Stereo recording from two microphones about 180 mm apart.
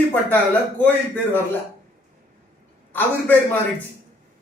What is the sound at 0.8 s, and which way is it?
Speech, 10° left (ahead or behind).